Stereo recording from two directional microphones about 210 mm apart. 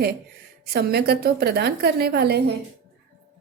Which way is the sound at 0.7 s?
50° right (ahead or behind).